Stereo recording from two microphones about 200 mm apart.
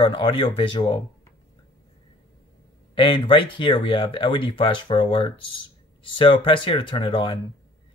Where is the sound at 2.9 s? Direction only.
25° left (ahead or behind).